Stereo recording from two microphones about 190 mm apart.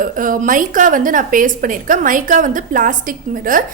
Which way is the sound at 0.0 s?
45° right (ahead or behind).